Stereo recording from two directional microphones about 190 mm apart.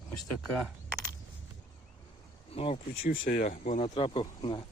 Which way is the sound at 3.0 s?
50° left (ahead or behind).